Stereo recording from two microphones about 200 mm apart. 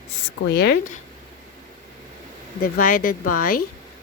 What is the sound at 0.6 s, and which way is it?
Speech, 50° left (ahead or behind).